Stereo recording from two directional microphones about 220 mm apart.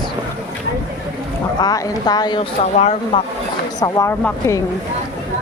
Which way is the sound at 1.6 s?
15° left (ahead or behind).